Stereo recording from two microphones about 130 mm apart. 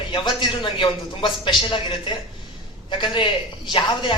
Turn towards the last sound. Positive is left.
turn(degrees=40)  # may be behind; listen again after turning